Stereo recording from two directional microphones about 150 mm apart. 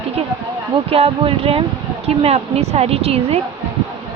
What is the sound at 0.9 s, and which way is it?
A woman's voice, 40° right (ahead or behind).